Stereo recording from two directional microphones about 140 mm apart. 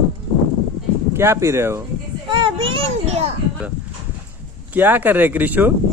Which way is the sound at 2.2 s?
35° right (ahead or behind).